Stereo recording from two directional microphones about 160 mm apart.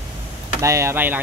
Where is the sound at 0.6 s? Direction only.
20° right (ahead or behind).